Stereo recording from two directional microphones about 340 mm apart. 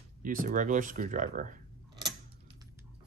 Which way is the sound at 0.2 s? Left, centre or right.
Right.